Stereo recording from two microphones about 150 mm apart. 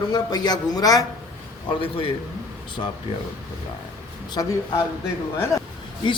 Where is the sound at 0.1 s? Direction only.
25° left (ahead or behind).